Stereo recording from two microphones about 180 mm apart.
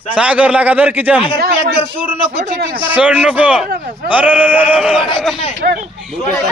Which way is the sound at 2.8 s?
10° right (ahead or behind).